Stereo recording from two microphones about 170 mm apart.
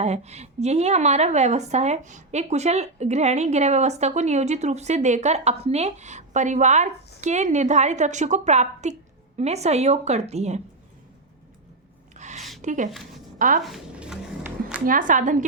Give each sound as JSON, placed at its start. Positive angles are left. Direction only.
{"t": 0.0, "sound": "a woman's voice", "side_deg": -40}
{"t": 12.1, "sound": "a sound", "side_deg": -45}
{"t": 12.6, "sound": "a woman's voice", "side_deg": -45}
{"t": 13.7, "sound": "speech", "side_deg": -5}
{"t": 14.8, "sound": "a woman's voice", "side_deg": -50}